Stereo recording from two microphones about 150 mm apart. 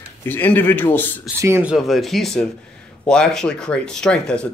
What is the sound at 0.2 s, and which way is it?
Speech, 15° left (ahead or behind).